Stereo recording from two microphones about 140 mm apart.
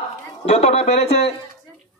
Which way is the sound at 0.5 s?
50° left (ahead or behind).